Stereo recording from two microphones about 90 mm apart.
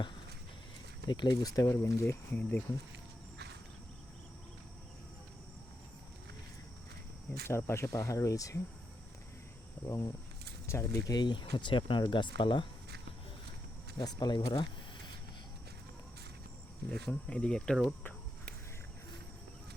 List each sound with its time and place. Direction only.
1.0 s speech: 55° left (ahead or behind); by 2.1 s 30° left (ahead or behind)
2.3 s speech: 15° left (ahead or behind)
7.4 s speech: 30° left (ahead or behind)
9.8 s speech: 30° left (ahead or behind)
11.2 s speech: 60° left (ahead or behind)
14.0 s speech: 50° left (ahead or behind)
17.1 s speech: 10° left (ahead or behind)